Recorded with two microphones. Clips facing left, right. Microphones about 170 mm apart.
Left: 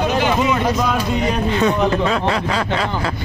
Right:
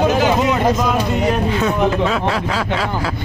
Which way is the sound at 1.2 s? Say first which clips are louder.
Even; 5° right (ahead or behind).